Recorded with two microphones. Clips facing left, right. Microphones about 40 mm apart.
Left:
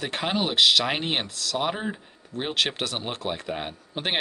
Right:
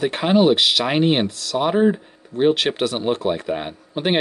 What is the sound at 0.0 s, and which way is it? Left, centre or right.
Speech, centre.